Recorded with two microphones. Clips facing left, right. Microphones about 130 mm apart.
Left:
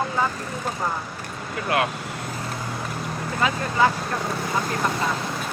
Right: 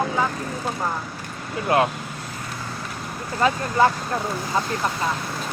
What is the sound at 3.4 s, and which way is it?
Speech, 40° right (ahead or behind).